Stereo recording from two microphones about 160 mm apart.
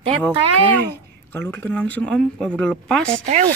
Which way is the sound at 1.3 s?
15° left (ahead or behind).